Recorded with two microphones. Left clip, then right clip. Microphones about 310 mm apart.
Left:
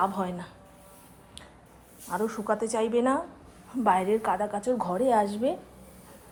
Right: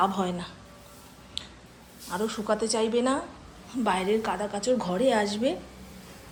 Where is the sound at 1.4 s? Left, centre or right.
Centre.